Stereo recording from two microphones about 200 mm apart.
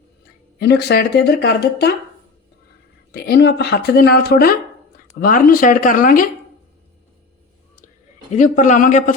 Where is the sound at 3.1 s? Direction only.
55° left (ahead or behind).